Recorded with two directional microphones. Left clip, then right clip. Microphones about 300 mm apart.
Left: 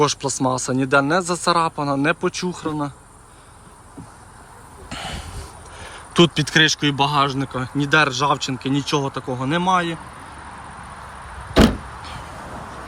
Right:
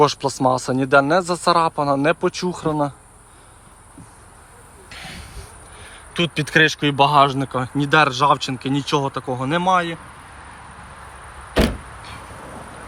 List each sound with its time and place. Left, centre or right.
0.0 s speech: centre
4.9 s a sound: left
6.4 s speech: centre
11.5 s vehicle: centre